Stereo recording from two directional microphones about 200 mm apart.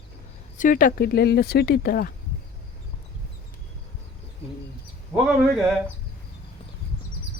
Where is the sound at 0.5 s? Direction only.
40° left (ahead or behind).